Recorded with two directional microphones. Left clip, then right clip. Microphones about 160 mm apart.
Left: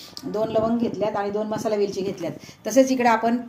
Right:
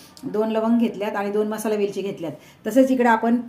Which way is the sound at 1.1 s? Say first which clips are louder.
Right 2 dB; 60° right (ahead or behind).